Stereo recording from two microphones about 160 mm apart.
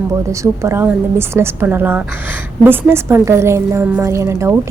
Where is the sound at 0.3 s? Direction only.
20° right (ahead or behind).